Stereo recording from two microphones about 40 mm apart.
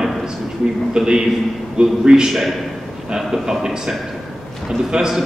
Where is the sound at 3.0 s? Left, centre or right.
Centre.